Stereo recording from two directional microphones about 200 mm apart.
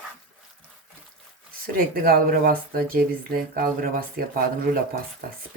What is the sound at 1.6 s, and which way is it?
Speech, 50° right (ahead or behind).